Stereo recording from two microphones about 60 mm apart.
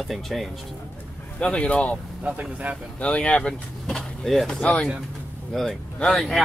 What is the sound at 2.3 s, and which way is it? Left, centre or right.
Speech, right.